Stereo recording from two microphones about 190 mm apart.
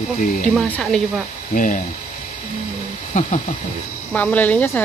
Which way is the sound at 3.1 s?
40° left (ahead or behind).